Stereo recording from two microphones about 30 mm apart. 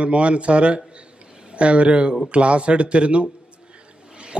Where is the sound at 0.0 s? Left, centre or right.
Right.